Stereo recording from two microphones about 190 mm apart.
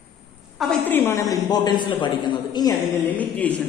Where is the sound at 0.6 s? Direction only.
5° left (ahead or behind); by 2.7 s 25° left (ahead or behind).